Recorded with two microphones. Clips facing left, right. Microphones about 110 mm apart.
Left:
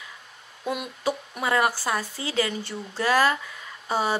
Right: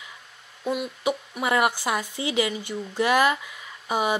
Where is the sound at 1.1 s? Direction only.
15° right (ahead or behind).